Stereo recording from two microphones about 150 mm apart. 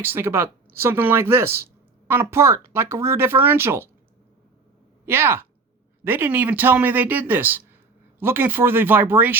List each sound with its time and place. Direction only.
0.0 s speech: 15° right (ahead or behind)
5.0 s speech: 15° right (ahead or behind)